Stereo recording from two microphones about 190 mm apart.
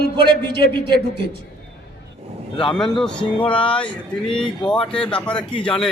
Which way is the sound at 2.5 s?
30° left (ahead or behind).